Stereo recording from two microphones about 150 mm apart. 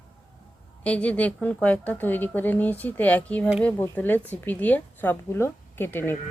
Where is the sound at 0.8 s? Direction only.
10° left (ahead or behind).